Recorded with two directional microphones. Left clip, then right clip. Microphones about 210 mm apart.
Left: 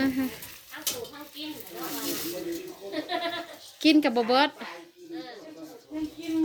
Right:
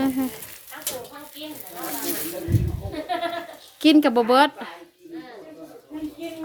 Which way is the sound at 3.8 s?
20° right (ahead or behind).